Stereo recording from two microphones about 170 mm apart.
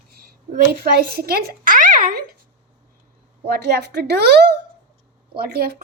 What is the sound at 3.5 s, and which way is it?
Speech, 75° right (ahead or behind).